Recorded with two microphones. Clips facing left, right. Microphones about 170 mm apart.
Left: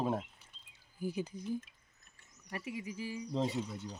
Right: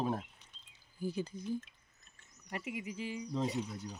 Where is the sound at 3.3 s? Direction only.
30° left (ahead or behind).